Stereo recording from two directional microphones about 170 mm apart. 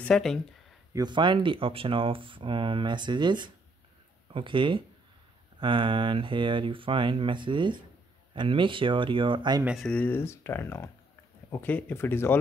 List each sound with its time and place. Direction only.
0.0 s speech: 5° left (ahead or behind)
0.9 s speech: 25° right (ahead or behind)
9.8 s speech: 5° left (ahead or behind)